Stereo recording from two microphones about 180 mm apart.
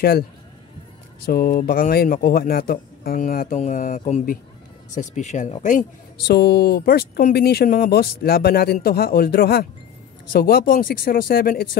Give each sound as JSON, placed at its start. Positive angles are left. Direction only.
{"t": 1.2, "sound": "a man's voice", "side_deg": 55}
{"t": 6.2, "sound": "speech", "side_deg": 65}